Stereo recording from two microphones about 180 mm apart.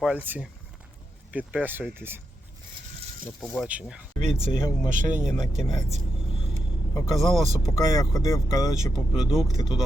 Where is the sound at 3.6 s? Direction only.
5° right (ahead or behind).